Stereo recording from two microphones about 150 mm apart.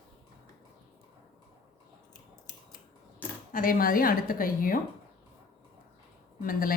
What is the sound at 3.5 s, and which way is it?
A woman's voice, 70° left (ahead or behind).